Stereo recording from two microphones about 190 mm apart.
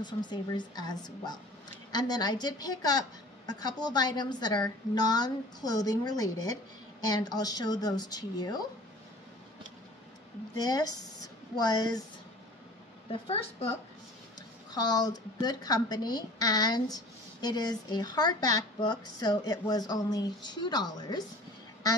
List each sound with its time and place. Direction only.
0.0 s speech: 25° left (ahead or behind)
10.5 s speech: 20° left (ahead or behind)
13.1 s a woman's voice: 30° left (ahead or behind)
14.7 s speech: 20° left (ahead or behind)